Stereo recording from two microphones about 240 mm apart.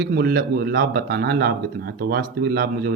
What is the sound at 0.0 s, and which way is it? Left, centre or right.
Speech, right.